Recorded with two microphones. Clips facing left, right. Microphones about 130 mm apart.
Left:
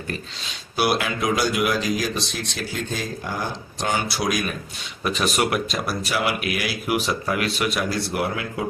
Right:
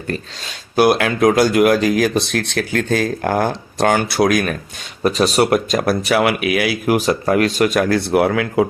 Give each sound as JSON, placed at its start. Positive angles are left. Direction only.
{"t": 0.8, "sound": "speech", "side_deg": -55}
{"t": 5.0, "sound": "speech", "side_deg": -35}
{"t": 6.8, "sound": "speech", "side_deg": -40}